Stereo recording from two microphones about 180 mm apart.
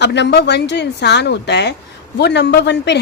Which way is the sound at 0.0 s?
70° left (ahead or behind).